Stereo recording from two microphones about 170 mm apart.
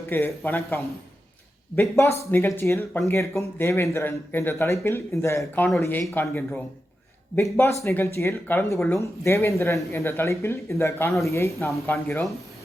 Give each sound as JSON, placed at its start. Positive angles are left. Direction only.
{"t": 0.1, "sound": "speech", "side_deg": 15}
{"t": 7.4, "sound": "speech", "side_deg": 10}